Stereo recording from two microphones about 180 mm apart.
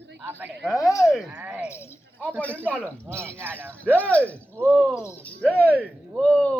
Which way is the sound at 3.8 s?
10° left (ahead or behind).